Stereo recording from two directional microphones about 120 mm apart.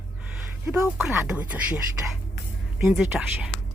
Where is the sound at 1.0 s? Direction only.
5° right (ahead or behind).